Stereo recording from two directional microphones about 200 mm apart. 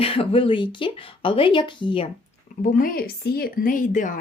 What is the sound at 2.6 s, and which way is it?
A woman's voice, 45° left (ahead or behind).